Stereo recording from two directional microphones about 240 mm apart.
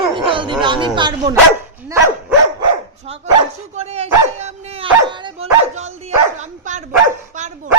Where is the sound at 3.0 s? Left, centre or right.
Right.